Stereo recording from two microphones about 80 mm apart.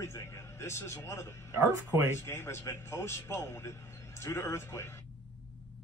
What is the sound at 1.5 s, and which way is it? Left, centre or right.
Speech, right.